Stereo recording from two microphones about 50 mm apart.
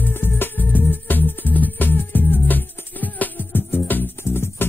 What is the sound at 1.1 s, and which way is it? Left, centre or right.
Music, left.